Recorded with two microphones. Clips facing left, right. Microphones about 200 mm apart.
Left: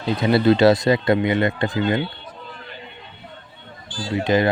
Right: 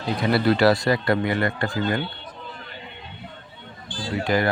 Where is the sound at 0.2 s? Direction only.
20° left (ahead or behind).